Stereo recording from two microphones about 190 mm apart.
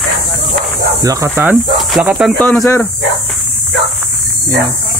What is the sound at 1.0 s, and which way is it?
Speech, 15° right (ahead or behind).